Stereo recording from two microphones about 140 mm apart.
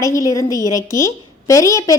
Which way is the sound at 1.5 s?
25° left (ahead or behind).